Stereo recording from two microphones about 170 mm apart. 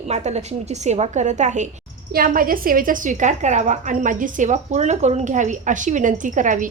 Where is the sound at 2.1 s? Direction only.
55° right (ahead or behind).